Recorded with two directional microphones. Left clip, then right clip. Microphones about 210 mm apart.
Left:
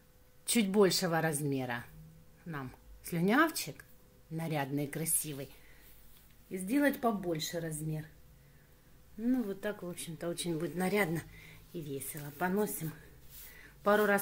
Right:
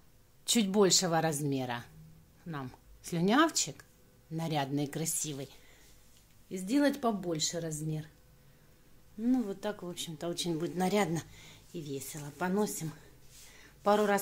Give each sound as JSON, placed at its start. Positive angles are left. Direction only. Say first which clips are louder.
{"t": 0.5, "sound": "speech", "louder": "right 1 dB", "side_deg": -5}
{"t": 6.5, "sound": "speech", "louder": "right 1 dB", "side_deg": -10}
{"t": 9.2, "sound": "speech", "louder": "right 2 dB", "side_deg": -10}
{"t": 13.6, "sound": "a sound", "louder": "right 1 dB", "side_deg": -5}